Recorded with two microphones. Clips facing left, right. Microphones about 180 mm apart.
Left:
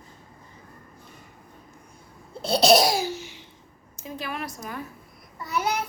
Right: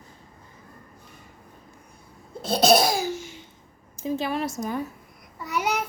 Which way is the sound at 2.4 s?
50° right (ahead or behind).